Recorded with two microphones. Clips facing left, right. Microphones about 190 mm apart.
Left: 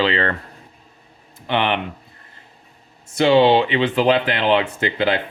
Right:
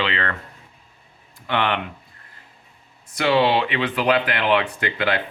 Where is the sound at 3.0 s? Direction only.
25° left (ahead or behind).